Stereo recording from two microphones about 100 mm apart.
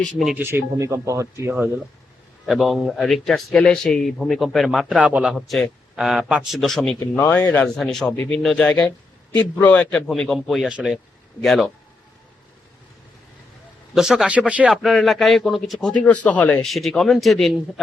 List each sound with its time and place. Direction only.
0.0 s a man's voice: 5° left (ahead or behind)
0.3 s speech: 25° right (ahead or behind)
2.5 s a man's voice: centre (ahead or behind)
4.9 s speech: 10° right (ahead or behind)
5.5 s a man's voice: 5° left (ahead or behind)
7.2 s speech: 35° left (ahead or behind)
7.8 s a man's voice: 5° left (ahead or behind)
8.1 s speech: 15° left (ahead or behind)
8.4 s speech: 5° left (ahead or behind)
10.1 s a man's voice: centre (ahead or behind)
13.9 s speech: 5° right (ahead or behind)
14.8 s a man's voice: centre (ahead or behind)
16.0 s speech: 15° left (ahead or behind)
16.6 s a man's voice: centre (ahead or behind)